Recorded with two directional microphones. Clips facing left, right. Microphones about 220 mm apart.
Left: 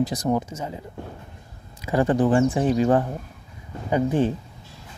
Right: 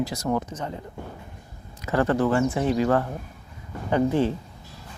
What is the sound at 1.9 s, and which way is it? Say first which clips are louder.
Speech: left 2 dB; 15° left (ahead or behind).